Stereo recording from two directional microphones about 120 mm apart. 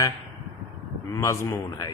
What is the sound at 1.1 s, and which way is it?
Speech, 25° left (ahead or behind).